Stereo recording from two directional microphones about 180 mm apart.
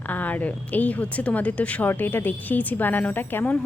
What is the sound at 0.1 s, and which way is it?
A woman's voice, 10° left (ahead or behind).